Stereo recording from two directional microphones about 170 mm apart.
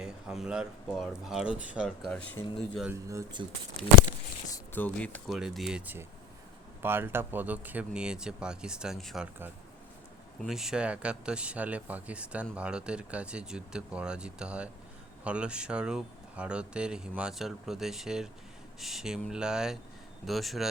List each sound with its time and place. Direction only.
0.0 s speech: 5° right (ahead or behind)
2.0 s speech: 5° left (ahead or behind)
2.8 s speech: 15° right (ahead or behind)
4.5 s speech: 10° left (ahead or behind)
5.4 s speech: 5° right (ahead or behind)